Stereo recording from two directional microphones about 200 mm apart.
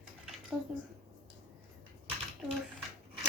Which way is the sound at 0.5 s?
15° right (ahead or behind).